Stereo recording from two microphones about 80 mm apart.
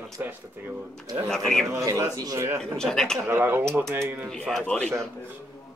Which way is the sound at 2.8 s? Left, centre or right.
Centre.